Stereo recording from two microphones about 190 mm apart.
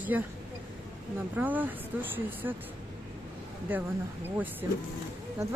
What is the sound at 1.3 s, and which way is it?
Speech, 10° right (ahead or behind).